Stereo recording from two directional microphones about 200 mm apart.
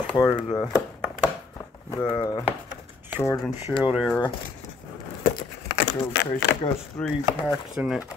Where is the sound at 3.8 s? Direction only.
5° right (ahead or behind).